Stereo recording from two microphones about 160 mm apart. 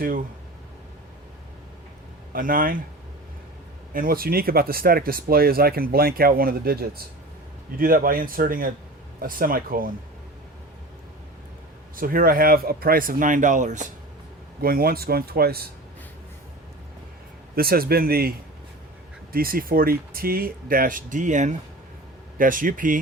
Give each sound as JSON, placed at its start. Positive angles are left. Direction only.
{"t": 2.3, "sound": "speech", "side_deg": -60}
{"t": 3.9, "sound": "speech", "side_deg": -65}
{"t": 7.8, "sound": "speech", "side_deg": -60}
{"t": 11.9, "sound": "speech", "side_deg": -65}
{"t": 14.6, "sound": "speech", "side_deg": -70}
{"t": 17.5, "sound": "speech", "side_deg": -70}